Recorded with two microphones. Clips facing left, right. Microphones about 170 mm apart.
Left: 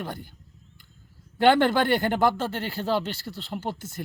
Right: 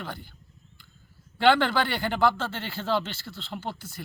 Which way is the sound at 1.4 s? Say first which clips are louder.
Left 2 dB; 45° left (ahead or behind).